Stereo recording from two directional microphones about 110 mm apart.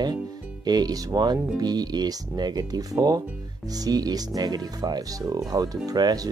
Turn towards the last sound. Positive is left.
turn(degrees=-35)  # may be behind; listen again after turning